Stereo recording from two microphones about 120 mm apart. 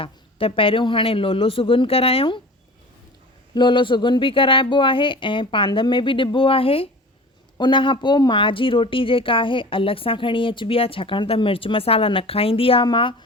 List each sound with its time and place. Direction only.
0.0 s speech: 50° left (ahead or behind)
3.5 s speech: 40° left (ahead or behind)